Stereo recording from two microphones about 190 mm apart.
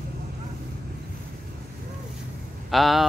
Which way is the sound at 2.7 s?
Centre (ahead or behind).